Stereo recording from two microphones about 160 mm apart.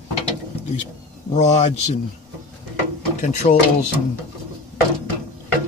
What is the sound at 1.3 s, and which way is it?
Speech, 45° left (ahead or behind).